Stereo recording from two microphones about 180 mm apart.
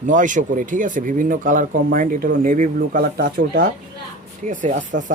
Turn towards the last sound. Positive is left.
turn(degrees=-45)  # may be behind; listen again after turning